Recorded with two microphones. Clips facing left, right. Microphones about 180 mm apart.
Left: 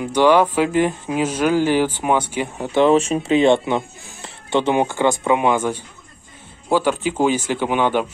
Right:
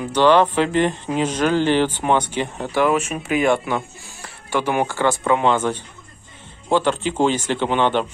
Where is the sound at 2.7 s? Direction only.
25° left (ahead or behind).